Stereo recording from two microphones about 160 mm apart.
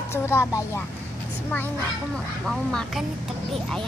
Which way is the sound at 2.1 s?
5° left (ahead or behind).